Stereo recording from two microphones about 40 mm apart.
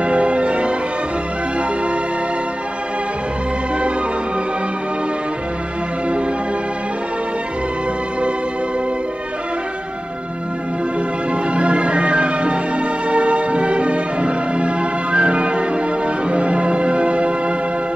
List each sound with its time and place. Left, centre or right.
0.0 s change ringing: right
11.5 s music: right